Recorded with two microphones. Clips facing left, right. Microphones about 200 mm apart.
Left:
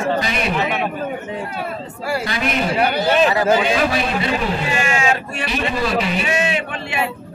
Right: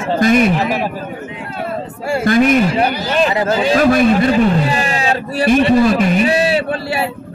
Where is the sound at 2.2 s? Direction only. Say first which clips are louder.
Right 11 dB; 50° right (ahead or behind).